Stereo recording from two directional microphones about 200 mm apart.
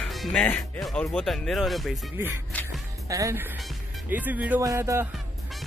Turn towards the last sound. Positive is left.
turn(degrees=-15)  # may be behind; listen again after turning